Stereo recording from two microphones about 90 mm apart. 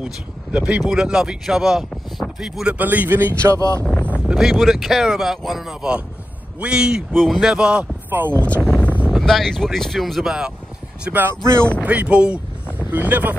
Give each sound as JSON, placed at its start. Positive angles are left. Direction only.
{"t": 0.0, "sound": "speech", "side_deg": -10}
{"t": 3.5, "sound": "speech", "side_deg": -40}
{"t": 4.0, "sound": "speech", "side_deg": -15}
{"t": 8.1, "sound": "speech", "side_deg": -20}
{"t": 8.5, "sound": "a sound", "side_deg": 15}
{"t": 9.1, "sound": "speech", "side_deg": 5}
{"t": 11.1, "sound": "speech", "side_deg": -20}